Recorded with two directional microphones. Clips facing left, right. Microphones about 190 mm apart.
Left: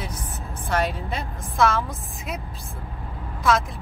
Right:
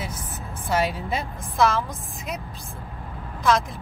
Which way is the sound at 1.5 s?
Centre (ahead or behind).